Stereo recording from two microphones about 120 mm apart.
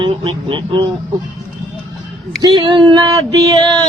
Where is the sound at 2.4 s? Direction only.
40° right (ahead or behind).